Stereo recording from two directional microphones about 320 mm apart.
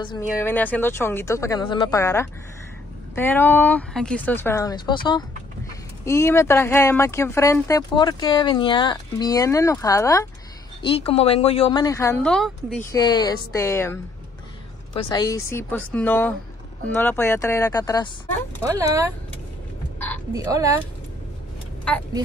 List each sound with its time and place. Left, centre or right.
0.4 s speech: centre
12.7 s speech: centre
15.0 s speech: centre
18.7 s speech: centre
20.3 s speech: centre